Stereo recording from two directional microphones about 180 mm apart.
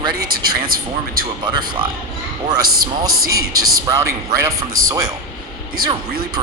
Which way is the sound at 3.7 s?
20° right (ahead or behind).